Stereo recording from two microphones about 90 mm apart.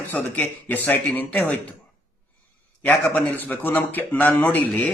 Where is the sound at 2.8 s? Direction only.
15° left (ahead or behind).